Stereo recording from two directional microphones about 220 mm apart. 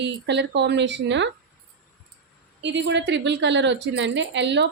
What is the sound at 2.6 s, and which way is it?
A woman's voice, 55° right (ahead or behind).